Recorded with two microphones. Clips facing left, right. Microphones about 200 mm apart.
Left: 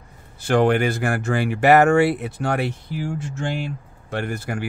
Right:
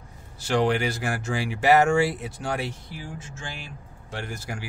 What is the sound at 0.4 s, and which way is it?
Speech, 55° left (ahead or behind).